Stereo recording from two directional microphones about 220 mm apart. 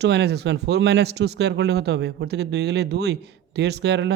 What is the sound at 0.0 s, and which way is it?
Speech, 50° right (ahead or behind).